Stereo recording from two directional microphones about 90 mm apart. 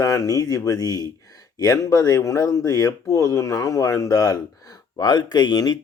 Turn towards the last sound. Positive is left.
turn(degrees=50)  # may be behind; listen again after turning